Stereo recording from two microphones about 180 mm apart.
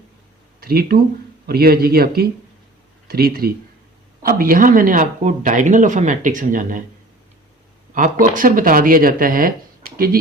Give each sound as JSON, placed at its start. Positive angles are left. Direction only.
{"t": 0.6, "sound": "speech", "side_deg": -55}
{"t": 7.9, "sound": "speech", "side_deg": -45}